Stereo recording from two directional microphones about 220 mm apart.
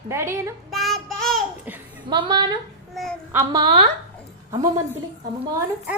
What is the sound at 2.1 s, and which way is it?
Speech, 20° right (ahead or behind).